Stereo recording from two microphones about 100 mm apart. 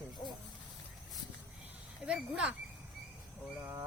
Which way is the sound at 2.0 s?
10° right (ahead or behind).